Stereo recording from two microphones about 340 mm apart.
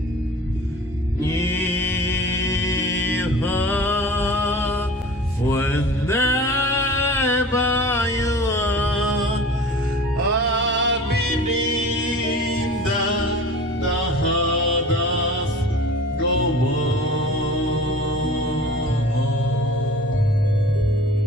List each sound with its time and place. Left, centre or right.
1.4 s music: centre
10.5 s music: right